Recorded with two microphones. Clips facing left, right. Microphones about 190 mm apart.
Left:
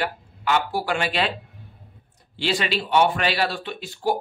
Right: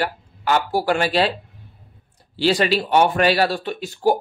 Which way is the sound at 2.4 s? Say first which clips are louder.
Right 6 dB; 40° right (ahead or behind).